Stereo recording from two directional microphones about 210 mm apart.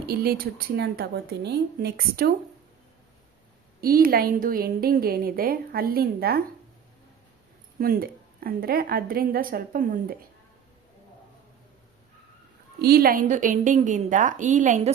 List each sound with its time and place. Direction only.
0.1 s speech: 45° right (ahead or behind)
3.8 s speech: 45° right (ahead or behind)
7.8 s speech: 45° right (ahead or behind)
12.8 s a woman's voice: 45° right (ahead or behind)